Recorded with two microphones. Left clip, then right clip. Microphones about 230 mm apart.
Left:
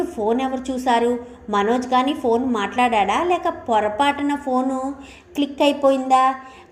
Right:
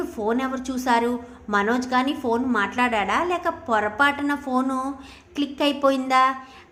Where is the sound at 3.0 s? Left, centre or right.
Right.